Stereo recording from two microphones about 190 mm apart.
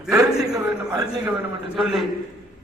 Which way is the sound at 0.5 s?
20° right (ahead or behind).